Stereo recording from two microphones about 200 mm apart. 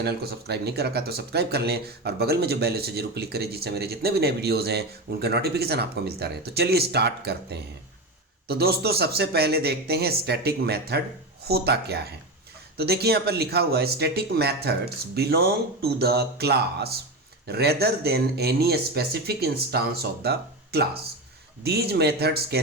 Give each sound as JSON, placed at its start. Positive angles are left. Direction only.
{"t": 0.0, "sound": "speech", "side_deg": -55}